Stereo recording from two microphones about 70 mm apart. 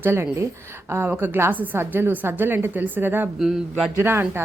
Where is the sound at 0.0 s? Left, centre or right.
Right.